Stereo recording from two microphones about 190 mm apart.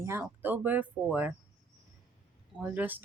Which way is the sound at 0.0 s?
15° right (ahead or behind).